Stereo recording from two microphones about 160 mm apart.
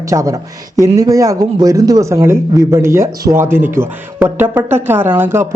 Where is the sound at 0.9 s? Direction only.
20° right (ahead or behind).